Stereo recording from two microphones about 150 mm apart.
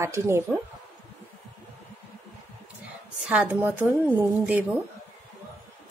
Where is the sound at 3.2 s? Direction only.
5° right (ahead or behind).